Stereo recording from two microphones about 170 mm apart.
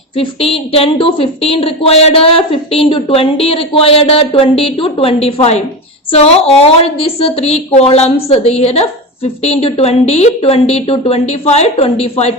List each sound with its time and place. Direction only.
0.2 s a woman's voice: 35° left (ahead or behind)